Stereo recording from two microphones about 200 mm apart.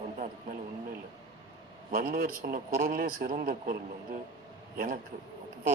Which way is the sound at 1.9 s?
45° right (ahead or behind).